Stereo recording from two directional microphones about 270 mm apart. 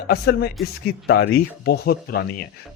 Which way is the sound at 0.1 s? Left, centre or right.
Left.